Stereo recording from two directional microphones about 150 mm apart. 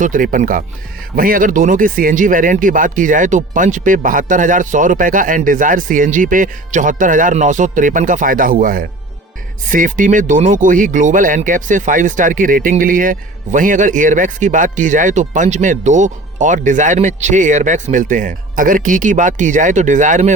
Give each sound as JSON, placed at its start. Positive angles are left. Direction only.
{"t": 0.0, "sound": "speech", "side_deg": -65}